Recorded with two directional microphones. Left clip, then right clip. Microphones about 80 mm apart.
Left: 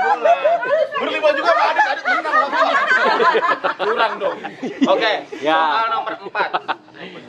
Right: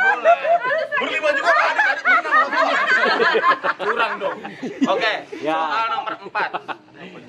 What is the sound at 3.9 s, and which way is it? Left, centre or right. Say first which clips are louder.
A man's voice: left 4 dB; centre.